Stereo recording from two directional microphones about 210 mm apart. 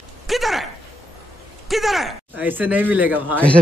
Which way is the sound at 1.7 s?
Centre (ahead or behind).